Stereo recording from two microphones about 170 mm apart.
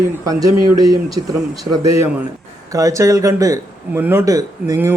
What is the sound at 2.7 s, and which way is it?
Speech, 20° right (ahead or behind).